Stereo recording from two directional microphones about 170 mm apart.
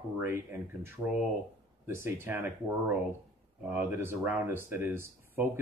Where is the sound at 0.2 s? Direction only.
15° right (ahead or behind).